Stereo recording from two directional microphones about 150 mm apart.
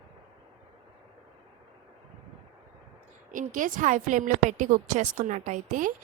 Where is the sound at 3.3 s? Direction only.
60° right (ahead or behind).